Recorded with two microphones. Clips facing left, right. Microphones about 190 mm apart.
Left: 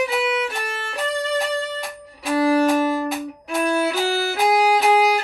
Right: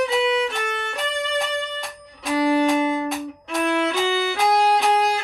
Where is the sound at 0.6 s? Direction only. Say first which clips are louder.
Right 2 dB; 35° left (ahead or behind).